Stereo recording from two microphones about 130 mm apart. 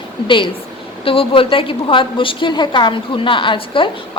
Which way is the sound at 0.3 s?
40° left (ahead or behind).